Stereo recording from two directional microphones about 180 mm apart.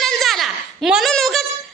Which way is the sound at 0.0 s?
Centre (ahead or behind).